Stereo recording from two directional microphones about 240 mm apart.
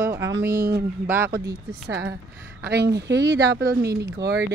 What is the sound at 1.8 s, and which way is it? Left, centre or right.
Speech, right.